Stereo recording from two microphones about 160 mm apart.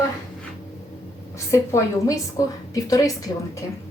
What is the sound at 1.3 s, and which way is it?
A woman's voice, 20° left (ahead or behind).